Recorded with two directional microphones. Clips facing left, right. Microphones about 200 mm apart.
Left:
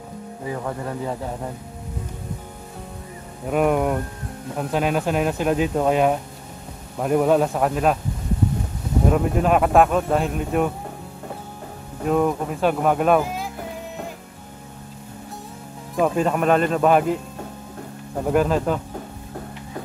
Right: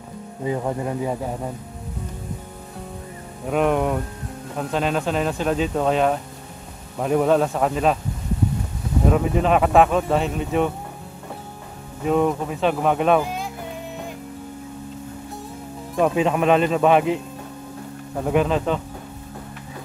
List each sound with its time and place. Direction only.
0.5 s speech: 20° right (ahead or behind)
3.4 s speech: 5° left (ahead or behind)
9.1 s speech: centre (ahead or behind)
12.0 s speech: centre (ahead or behind)
16.0 s speech: centre (ahead or behind)
18.2 s speech: centre (ahead or behind)